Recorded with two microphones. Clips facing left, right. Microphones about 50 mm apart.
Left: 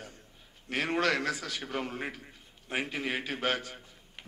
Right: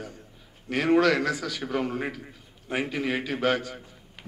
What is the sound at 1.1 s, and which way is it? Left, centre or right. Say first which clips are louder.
Speech: right 5 dB; right.